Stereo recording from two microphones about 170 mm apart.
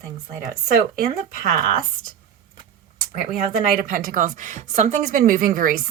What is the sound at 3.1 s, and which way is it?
A woman's voice, 55° right (ahead or behind).